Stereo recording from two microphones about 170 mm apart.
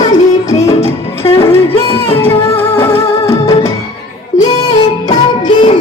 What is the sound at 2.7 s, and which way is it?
Music, 15° left (ahead or behind).